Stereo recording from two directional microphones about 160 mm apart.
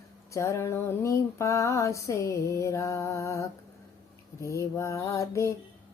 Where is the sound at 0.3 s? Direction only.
15° left (ahead or behind).